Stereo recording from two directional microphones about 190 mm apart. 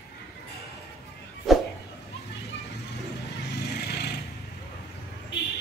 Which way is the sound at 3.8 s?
60° left (ahead or behind).